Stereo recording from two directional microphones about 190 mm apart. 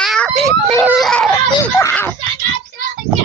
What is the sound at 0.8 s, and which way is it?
Baby cry, 5° right (ahead or behind).